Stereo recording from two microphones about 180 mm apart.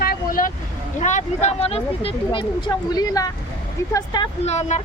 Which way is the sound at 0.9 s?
40° left (ahead or behind).